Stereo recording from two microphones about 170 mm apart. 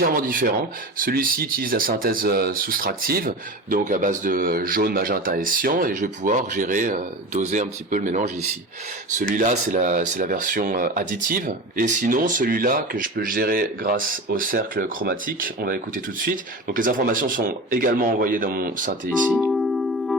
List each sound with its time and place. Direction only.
0.0 s speech: 55° right (ahead or behind)
19.4 s music: centre (ahead or behind)